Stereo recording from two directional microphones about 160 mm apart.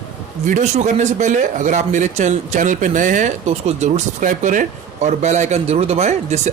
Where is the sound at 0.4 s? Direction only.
50° right (ahead or behind).